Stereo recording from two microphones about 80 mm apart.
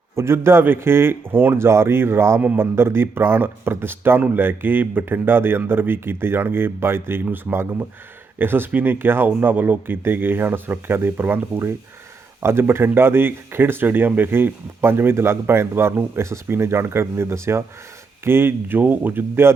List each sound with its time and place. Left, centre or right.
0.2 s speech: right